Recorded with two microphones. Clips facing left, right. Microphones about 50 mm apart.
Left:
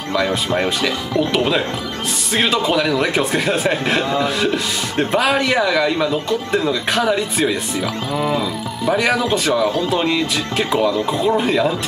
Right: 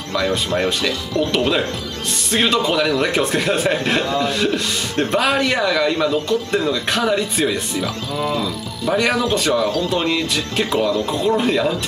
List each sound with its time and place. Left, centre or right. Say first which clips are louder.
0.1 s a man's voice: left 1 dB; centre
8.1 s speech: left 2 dB; centre
8.9 s a man's voice: even; centre